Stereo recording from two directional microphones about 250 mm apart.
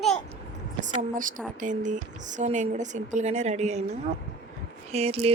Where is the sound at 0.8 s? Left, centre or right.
Right.